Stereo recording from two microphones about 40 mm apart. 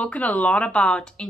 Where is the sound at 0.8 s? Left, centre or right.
Left.